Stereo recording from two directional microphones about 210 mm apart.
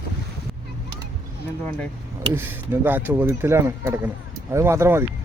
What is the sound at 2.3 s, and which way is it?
Speech, 10° right (ahead or behind).